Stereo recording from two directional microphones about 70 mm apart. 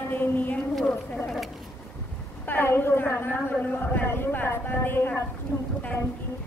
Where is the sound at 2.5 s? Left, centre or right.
Left.